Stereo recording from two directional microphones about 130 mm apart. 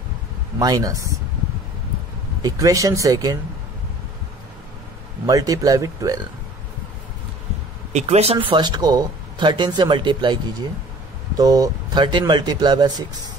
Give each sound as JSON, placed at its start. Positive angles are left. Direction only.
{"t": 0.6, "sound": "speech", "side_deg": -30}
{"t": 2.4, "sound": "speech", "side_deg": -25}
{"t": 5.2, "sound": "speech", "side_deg": -25}
{"t": 7.9, "sound": "speech", "side_deg": -55}
{"t": 8.5, "sound": "speech", "side_deg": -35}